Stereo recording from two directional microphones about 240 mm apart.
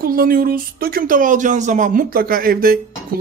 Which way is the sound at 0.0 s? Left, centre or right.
Right.